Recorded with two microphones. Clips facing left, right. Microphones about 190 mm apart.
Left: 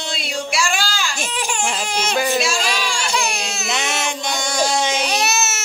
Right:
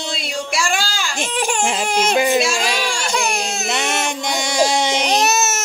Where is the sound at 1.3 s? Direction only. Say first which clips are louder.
Right 4 dB; 55° right (ahead or behind).